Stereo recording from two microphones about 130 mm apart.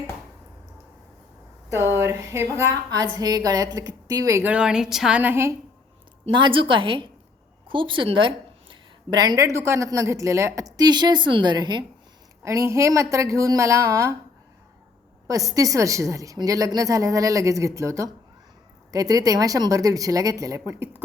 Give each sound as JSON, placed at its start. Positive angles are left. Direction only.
{"t": 1.7, "sound": "speech", "side_deg": -20}
{"t": 4.4, "sound": "a woman's voice", "side_deg": -5}
{"t": 6.3, "sound": "a woman's voice", "side_deg": -40}
{"t": 15.3, "sound": "speech", "side_deg": -25}